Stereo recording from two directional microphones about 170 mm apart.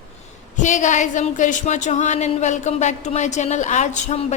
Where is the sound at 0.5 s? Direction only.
45° left (ahead or behind).